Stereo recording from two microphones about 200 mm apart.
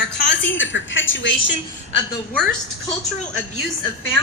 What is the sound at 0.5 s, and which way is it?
Speech, 70° left (ahead or behind).